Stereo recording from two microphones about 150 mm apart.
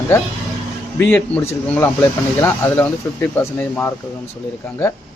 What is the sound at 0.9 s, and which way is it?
Speech, 10° left (ahead or behind).